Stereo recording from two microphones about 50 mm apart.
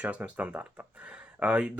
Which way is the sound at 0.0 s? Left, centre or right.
Right.